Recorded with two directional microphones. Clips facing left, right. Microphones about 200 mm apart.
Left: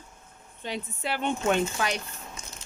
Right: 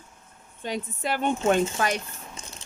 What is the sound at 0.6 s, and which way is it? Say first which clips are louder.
A woman's voice: right 3 dB; 45° right (ahead or behind).